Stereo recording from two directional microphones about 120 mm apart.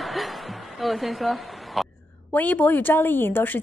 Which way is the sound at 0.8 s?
Centre (ahead or behind).